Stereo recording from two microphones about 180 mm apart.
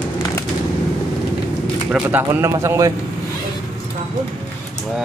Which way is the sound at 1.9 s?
10° right (ahead or behind).